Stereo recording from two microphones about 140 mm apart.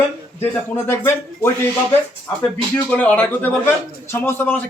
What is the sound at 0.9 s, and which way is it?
Speech, 15° left (ahead or behind).